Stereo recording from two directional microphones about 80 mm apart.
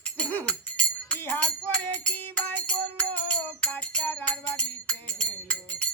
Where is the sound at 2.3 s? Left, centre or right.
Centre.